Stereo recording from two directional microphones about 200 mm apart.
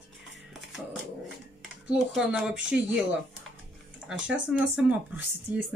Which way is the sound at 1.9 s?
5° right (ahead or behind).